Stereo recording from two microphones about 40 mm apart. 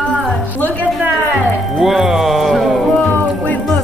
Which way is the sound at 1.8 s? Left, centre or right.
Centre.